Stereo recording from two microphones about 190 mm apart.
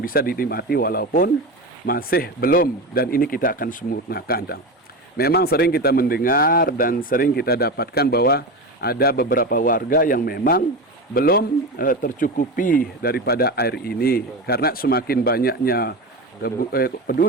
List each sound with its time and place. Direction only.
0.0 s speech: 50° left (ahead or behind)